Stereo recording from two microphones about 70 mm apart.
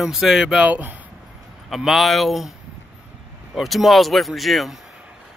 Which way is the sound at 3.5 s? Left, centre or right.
Centre.